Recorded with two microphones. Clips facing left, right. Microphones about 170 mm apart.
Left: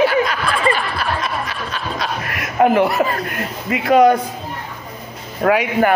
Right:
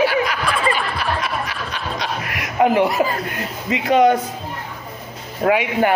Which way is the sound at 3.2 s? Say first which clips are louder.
Left 1 dB; 20° right (ahead or behind).